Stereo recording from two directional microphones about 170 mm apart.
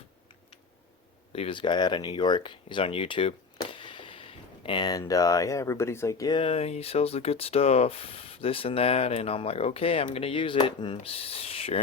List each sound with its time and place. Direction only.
1.3 s speech: 35° left (ahead or behind)